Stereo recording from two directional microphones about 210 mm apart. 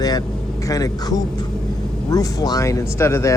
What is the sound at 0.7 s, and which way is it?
Speech, 15° left (ahead or behind).